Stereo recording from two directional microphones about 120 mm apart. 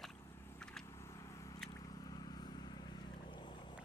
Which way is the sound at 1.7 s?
35° left (ahead or behind).